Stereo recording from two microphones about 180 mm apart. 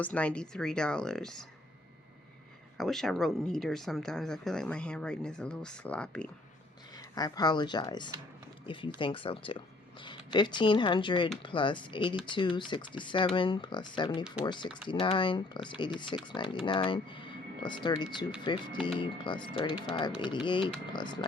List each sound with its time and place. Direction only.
0.0 s speech: 5° left (ahead or behind)
2.7 s speech: centre (ahead or behind)
6.9 s speech: 20° left (ahead or behind)